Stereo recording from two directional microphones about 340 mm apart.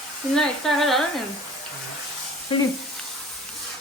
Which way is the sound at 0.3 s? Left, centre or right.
Centre.